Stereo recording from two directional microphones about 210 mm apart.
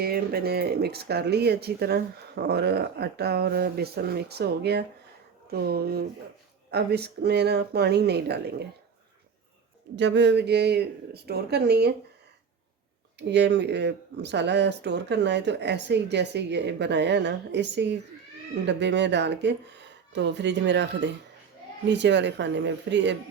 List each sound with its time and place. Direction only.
0.0 s speech: 45° right (ahead or behind)
9.9 s speech: 55° right (ahead or behind)
13.1 s speech: 55° right (ahead or behind)